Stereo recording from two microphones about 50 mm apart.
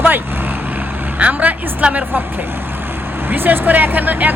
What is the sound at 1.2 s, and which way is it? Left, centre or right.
A woman's voice, right.